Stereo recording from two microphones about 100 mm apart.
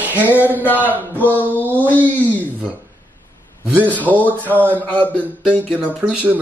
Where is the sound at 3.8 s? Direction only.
15° left (ahead or behind).